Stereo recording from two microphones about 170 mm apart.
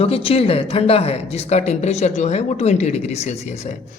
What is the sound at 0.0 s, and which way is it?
Speech, 35° left (ahead or behind).